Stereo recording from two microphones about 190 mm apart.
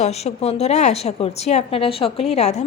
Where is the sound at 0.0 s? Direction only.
35° left (ahead or behind).